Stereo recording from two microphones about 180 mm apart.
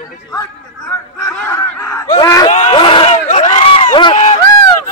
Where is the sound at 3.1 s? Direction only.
40° left (ahead or behind).